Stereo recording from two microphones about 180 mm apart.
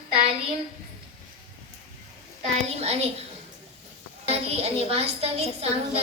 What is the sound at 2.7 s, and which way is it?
Speech, 35° right (ahead or behind).